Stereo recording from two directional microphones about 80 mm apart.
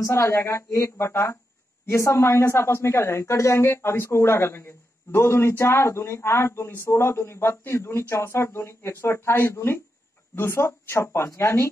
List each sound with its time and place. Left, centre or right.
0.0 s speech: left